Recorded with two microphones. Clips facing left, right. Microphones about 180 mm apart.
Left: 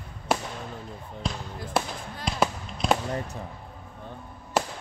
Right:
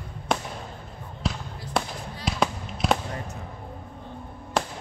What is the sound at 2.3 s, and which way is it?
Fireworks, centre (ahead or behind).